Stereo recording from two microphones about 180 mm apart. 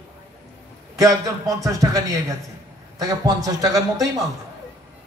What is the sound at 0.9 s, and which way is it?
A man's voice, 20° right (ahead or behind).